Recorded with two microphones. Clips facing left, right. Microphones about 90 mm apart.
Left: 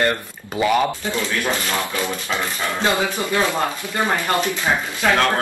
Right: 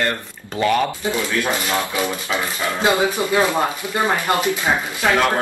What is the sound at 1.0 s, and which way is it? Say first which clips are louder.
Speech: right 2 dB; 20° right (ahead or behind).